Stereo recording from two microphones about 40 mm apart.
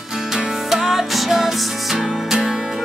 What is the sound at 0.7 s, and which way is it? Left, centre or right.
Music, centre.